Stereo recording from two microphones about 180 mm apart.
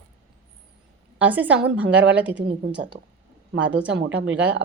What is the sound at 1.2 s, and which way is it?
A woman's voice, 10° right (ahead or behind).